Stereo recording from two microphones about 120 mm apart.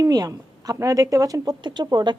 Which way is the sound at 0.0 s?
30° right (ahead or behind).